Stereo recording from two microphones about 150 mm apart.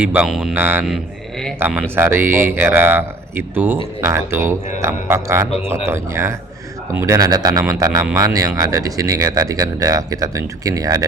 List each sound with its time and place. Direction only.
0.0 s speech: 10° right (ahead or behind)